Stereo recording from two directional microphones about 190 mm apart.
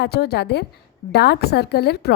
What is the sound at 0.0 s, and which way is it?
Speech, 55° left (ahead or behind).